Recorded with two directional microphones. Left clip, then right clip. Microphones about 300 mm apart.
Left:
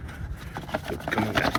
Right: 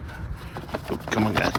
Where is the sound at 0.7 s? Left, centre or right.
Centre.